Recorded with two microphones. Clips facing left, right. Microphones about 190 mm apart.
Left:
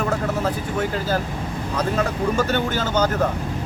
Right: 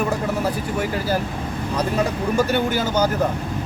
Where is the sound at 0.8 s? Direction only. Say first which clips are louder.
Even; 10° right (ahead or behind).